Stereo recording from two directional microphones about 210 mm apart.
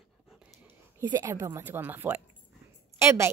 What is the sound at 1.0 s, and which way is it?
Speech, 15° right (ahead or behind).